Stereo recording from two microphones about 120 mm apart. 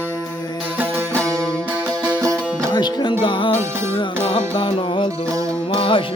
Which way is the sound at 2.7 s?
40° left (ahead or behind).